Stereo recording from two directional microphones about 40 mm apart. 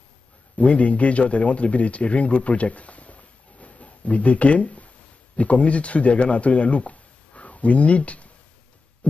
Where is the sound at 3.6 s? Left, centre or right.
Left.